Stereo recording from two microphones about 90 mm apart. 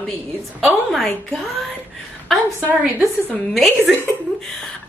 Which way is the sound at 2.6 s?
20° right (ahead or behind).